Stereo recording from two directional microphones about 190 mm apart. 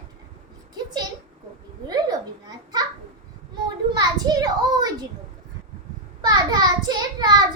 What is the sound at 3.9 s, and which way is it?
Children playing, 20° right (ahead or behind).